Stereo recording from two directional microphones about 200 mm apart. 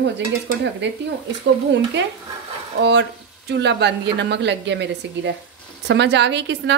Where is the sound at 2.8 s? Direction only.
60° right (ahead or behind).